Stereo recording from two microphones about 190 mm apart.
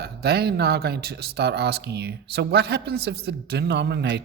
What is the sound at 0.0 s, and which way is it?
Speech, 55° right (ahead or behind).